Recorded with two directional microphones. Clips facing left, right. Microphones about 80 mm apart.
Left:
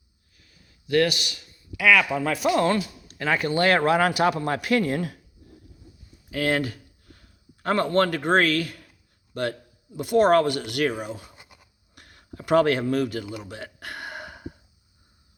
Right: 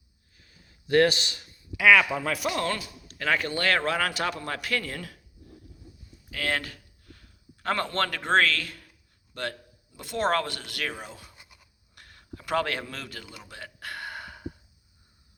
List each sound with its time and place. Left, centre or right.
0.9 s a man's voice: right
1.7 s speech: centre
2.2 s speech: centre
2.6 s speech: centre
6.3 s a man's voice: centre
11.2 s speech: left
12.5 s speech: left
13.8 s a sound: left